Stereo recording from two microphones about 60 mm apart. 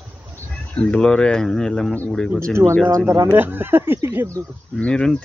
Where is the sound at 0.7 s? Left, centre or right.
Centre.